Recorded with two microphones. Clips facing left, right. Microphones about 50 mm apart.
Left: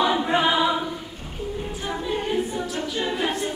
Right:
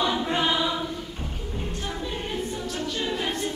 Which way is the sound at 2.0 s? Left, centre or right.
Centre.